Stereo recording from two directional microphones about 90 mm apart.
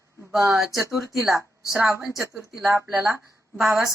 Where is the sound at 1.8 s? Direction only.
25° right (ahead or behind).